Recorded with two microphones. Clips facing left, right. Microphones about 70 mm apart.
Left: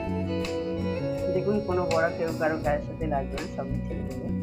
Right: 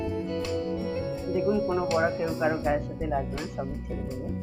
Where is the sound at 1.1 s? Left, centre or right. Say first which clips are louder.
Left 1 dB; right.